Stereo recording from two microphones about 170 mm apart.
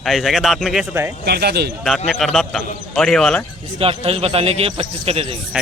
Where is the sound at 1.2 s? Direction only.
70° right (ahead or behind).